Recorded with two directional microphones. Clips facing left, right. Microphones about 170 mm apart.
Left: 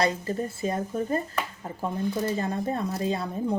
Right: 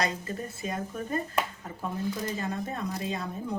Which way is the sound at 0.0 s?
30° left (ahead or behind).